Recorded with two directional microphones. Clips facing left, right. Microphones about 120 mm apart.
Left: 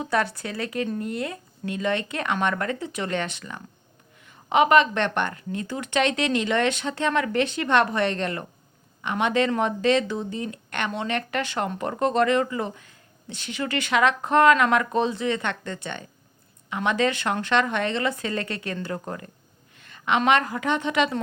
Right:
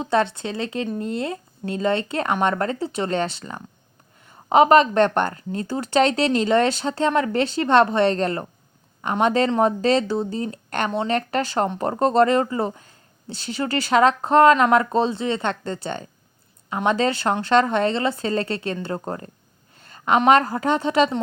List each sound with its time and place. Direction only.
0.0 s a woman's voice: 25° right (ahead or behind)